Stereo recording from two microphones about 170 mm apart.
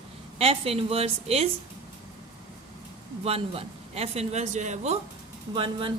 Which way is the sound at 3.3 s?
35° right (ahead or behind).